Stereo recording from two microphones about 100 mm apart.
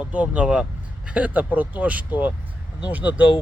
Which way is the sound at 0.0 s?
15° right (ahead or behind).